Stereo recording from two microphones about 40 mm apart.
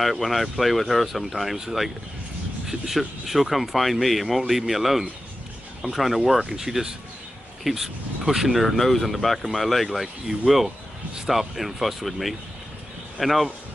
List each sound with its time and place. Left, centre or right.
0.0 s speech: centre